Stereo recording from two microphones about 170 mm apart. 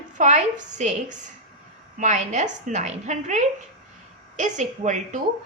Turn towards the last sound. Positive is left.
turn(degrees=-45)  # may be behind; listen again after turning